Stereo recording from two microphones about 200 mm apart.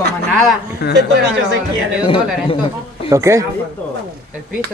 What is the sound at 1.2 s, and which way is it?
Speech, 60° right (ahead or behind).